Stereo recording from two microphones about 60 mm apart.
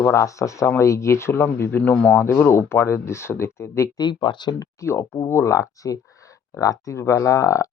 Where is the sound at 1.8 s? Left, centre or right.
Left.